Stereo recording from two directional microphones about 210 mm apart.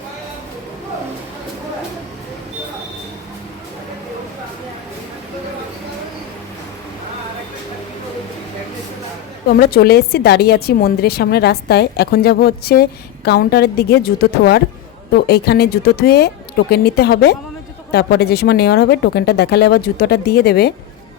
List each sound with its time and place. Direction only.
9.6 s a woman's voice: 45° left (ahead or behind)